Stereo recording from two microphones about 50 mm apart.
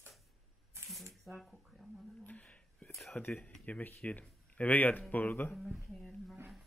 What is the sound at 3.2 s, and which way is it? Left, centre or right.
Speech, left.